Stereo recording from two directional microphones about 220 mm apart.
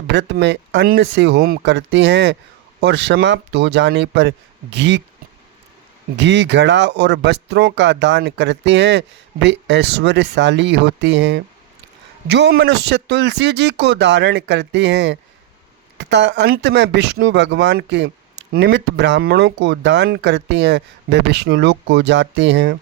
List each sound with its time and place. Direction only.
0.1 s speech: 55° right (ahead or behind)
6.1 s speech: 55° right (ahead or behind)